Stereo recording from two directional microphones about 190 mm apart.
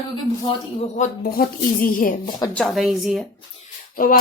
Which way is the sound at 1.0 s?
50° left (ahead or behind).